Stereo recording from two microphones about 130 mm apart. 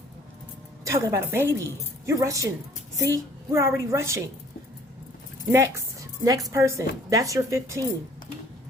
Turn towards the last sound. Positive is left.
turn(degrees=-25)  # may be behind; listen again after turning